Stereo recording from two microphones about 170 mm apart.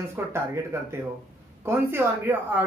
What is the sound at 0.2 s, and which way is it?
A woman's voice, 15° right (ahead or behind).